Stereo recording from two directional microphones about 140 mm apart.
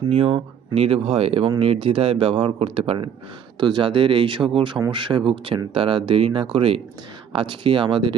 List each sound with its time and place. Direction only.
0.1 s speech: 45° right (ahead or behind)